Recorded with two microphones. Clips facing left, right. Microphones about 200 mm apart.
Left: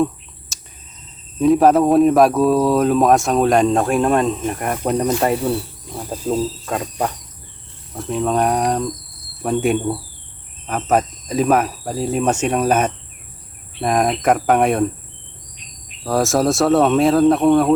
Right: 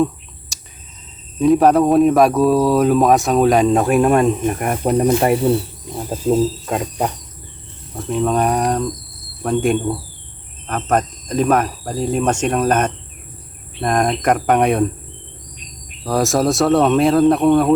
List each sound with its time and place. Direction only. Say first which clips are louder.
0.5 s a sound: right 1 dB; centre (ahead or behind)
1.4 s speech: even; centre (ahead or behind)
4.9 s speech: right 4 dB; 20° right (ahead or behind)
6.1 s speech: right 4 dB; 10° right (ahead or behind)
7.9 s speech: right 1 dB; centre (ahead or behind)
16.0 s speech: even; centre (ahead or behind)